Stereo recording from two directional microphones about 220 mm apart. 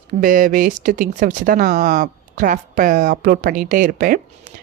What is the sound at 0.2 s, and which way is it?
Speech, 40° right (ahead or behind).